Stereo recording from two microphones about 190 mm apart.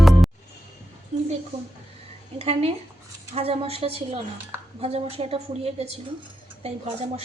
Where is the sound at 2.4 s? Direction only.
35° right (ahead or behind).